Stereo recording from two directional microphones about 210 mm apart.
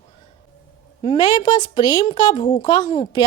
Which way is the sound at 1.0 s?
25° left (ahead or behind).